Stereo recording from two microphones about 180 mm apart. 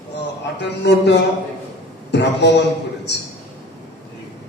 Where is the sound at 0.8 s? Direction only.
70° left (ahead or behind).